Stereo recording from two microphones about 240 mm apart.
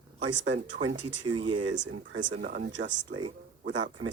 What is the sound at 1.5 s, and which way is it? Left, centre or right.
Speech, right.